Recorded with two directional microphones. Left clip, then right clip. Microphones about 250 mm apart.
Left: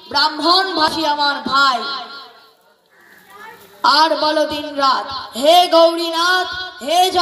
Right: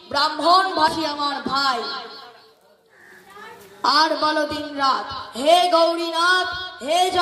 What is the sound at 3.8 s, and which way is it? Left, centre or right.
A man's voice, centre.